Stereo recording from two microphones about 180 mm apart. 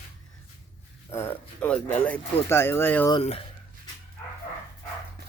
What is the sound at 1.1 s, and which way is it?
Speech, 15° left (ahead or behind).